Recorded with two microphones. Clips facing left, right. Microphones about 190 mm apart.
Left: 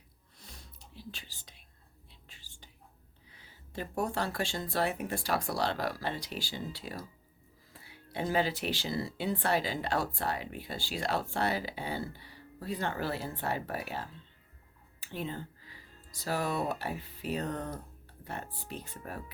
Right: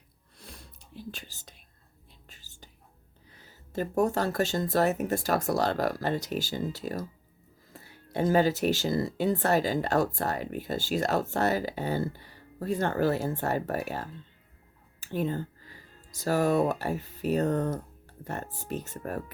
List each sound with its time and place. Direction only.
0.9 s whispering: 50° right (ahead or behind)
3.3 s speech: 45° right (ahead or behind)